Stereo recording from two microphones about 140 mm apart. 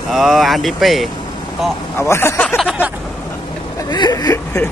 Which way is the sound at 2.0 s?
15° left (ahead or behind).